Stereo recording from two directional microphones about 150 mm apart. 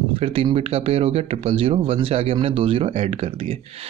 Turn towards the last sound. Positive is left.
turn(degrees=-40)  # may be behind; listen again after turning